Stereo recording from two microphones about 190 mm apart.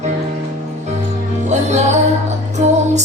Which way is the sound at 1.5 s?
35° right (ahead or behind).